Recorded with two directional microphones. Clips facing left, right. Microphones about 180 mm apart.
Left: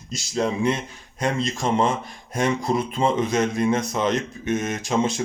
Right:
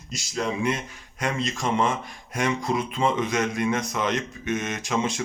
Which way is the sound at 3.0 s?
30° left (ahead or behind).